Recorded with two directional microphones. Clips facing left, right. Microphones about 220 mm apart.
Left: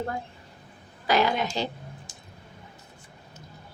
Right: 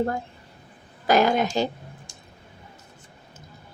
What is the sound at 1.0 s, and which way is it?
Speech, 45° right (ahead or behind).